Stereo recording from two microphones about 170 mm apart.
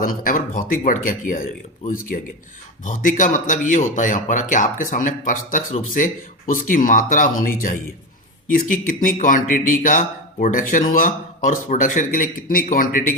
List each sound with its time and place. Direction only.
0.0 s speech: 55° left (ahead or behind)
2.8 s speech: 50° left (ahead or behind)